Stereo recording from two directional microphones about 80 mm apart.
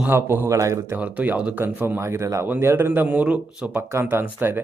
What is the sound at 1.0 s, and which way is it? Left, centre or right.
Speech, centre.